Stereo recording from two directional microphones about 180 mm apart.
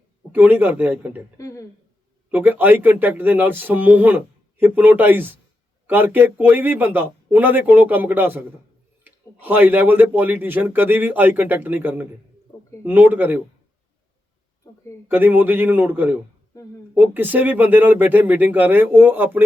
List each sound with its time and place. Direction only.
0.3 s a man's voice: 10° right (ahead or behind)
1.4 s speech: 20° left (ahead or behind)
2.3 s a man's voice: 10° right (ahead or behind)
15.0 s a man's voice: 10° right (ahead or behind)